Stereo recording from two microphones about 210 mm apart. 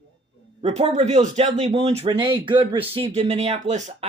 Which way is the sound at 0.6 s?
30° right (ahead or behind).